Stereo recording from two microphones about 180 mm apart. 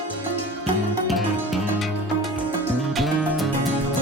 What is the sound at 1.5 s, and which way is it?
Music, centre (ahead or behind).